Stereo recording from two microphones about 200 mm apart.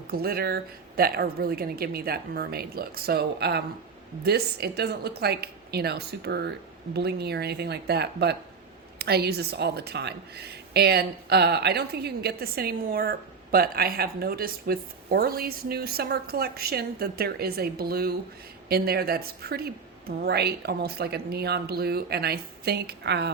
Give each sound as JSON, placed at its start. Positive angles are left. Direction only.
{"t": 0.1, "sound": "a woman's voice", "side_deg": -50}